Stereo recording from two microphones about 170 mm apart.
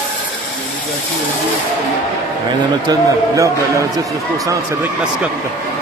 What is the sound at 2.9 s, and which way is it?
Speech, 20° right (ahead or behind).